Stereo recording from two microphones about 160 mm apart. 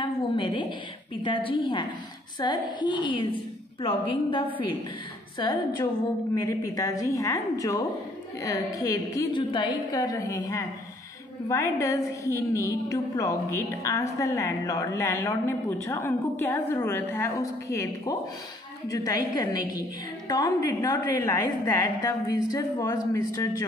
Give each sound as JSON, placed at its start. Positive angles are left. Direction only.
{"t": 0.0, "sound": "a sound", "side_deg": 30}
{"t": 1.2, "sound": "a woman's voice", "side_deg": 30}
{"t": 5.4, "sound": "a woman's voice", "side_deg": 25}